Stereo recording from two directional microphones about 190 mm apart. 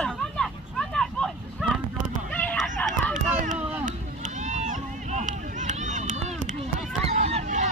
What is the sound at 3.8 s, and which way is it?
Run, 40° right (ahead or behind).